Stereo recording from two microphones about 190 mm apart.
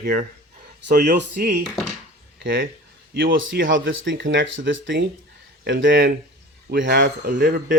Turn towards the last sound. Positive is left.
turn(degrees=-60)  # may be behind; listen again after turning